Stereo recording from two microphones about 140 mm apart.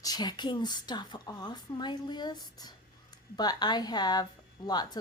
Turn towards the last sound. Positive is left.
turn(degrees=30)  # may be behind; listen again after turning